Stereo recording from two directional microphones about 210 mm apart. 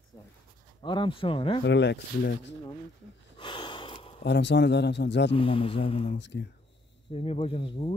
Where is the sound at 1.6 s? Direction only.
55° left (ahead or behind).